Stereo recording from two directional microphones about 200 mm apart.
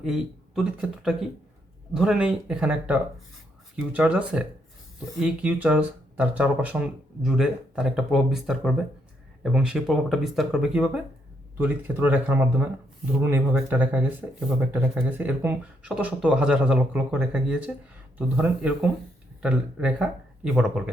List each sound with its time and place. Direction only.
0.0 s a man's voice: centre (ahead or behind)